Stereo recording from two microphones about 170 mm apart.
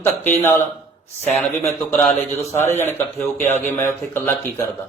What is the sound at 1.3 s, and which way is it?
Speech, 10° left (ahead or behind).